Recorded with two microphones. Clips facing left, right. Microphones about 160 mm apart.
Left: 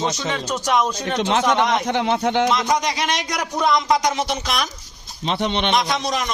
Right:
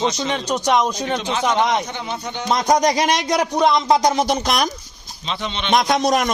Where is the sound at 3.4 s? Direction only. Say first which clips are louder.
Right 1 dB; 25° right (ahead or behind); by 4.6 s 40° right (ahead or behind).